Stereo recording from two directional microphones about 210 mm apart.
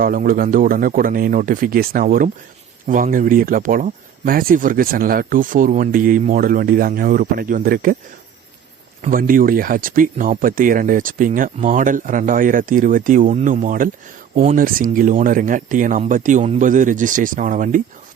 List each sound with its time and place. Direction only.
0.0 s speech: 40° right (ahead or behind)
9.0 s speech: 40° right (ahead or behind)